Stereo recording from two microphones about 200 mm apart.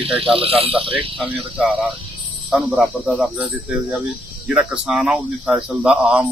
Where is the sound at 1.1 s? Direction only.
5° right (ahead or behind).